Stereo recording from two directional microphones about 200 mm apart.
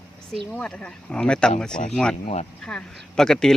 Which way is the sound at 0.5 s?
5° left (ahead or behind).